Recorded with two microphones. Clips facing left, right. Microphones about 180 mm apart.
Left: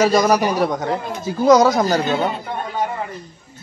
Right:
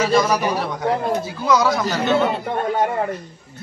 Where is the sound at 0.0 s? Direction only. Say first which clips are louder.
Left 3 dB; 40° left (ahead or behind).